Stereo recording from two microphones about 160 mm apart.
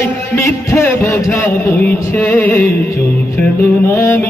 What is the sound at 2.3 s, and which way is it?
A man's voice, 10° left (ahead or behind).